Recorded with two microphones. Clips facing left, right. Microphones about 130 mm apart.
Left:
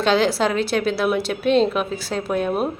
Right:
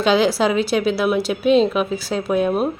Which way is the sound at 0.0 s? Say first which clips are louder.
Right 2 dB; 5° right (ahead or behind).